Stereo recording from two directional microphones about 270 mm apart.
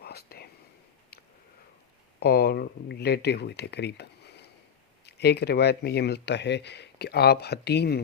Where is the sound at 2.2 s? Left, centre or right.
Left.